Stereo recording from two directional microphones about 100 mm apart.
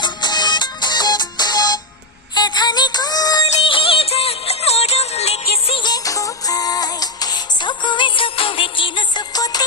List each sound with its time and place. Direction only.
0.0 s music: 45° left (ahead or behind)
3.7 s music: 65° left (ahead or behind)
5.8 s music: 35° left (ahead or behind)